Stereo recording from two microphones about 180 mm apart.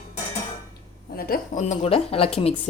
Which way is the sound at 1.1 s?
55° left (ahead or behind).